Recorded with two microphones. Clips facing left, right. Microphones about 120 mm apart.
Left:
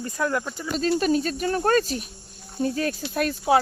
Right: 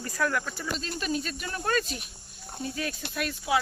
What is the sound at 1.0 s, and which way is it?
Speech, 40° left (ahead or behind).